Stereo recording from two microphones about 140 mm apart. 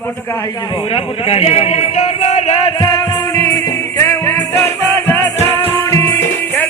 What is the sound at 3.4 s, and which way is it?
Music, 25° left (ahead or behind).